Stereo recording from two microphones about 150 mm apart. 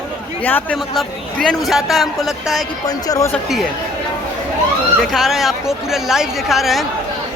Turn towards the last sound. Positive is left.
turn(degrees=0)  # may be behind; listen again after turning